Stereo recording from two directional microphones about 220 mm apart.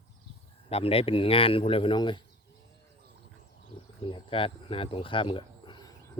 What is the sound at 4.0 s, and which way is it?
Speech, 25° left (ahead or behind).